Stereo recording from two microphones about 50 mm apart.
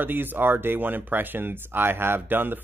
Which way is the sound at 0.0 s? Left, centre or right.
Right.